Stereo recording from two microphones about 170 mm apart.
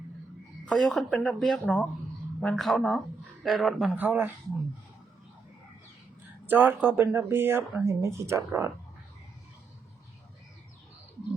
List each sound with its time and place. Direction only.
0.6 s speech: 5° left (ahead or behind)
6.4 s speech: 10° right (ahead or behind)